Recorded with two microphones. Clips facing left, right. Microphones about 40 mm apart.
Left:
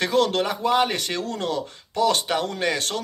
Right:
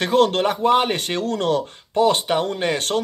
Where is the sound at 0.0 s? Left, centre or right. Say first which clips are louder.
Right 4 dB; right.